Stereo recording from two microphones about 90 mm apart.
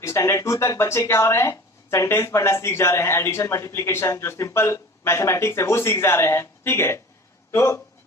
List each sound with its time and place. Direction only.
0.0 s speech: 30° left (ahead or behind)